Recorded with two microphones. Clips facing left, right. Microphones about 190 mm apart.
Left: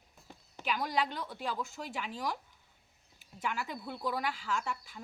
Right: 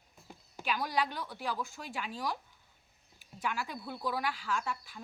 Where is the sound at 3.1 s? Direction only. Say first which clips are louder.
Even; 20° left (ahead or behind).